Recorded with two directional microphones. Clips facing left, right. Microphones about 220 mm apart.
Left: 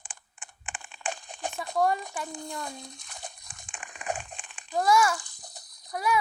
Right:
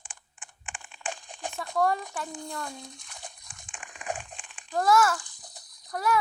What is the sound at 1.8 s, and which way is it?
Speech, 5° left (ahead or behind).